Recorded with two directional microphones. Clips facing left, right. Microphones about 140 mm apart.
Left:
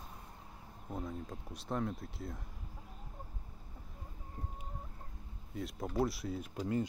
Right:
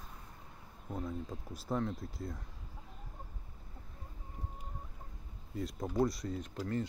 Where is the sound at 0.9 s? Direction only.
Centre (ahead or behind).